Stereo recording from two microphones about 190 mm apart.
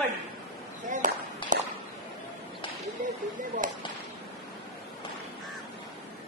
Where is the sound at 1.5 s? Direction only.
40° right (ahead or behind).